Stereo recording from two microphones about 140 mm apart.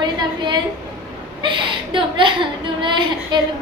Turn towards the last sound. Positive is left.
turn(degrees=-35)  # may be behind; listen again after turning